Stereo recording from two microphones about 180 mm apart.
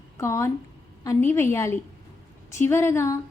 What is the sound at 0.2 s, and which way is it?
A woman's voice, 15° left (ahead or behind).